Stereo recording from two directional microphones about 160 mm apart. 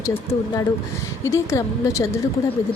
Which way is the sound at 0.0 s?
20° left (ahead or behind).